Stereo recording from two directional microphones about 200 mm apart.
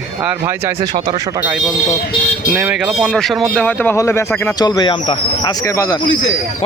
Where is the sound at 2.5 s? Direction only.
5° right (ahead or behind); by 6.0 s 15° left (ahead or behind).